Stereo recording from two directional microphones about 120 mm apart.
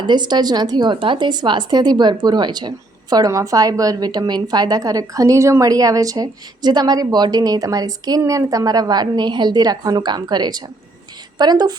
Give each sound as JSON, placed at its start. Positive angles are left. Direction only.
{"t": 0.0, "sound": "speech", "side_deg": -35}